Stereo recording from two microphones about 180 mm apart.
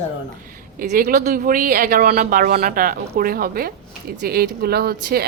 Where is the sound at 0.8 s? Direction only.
50° right (ahead or behind).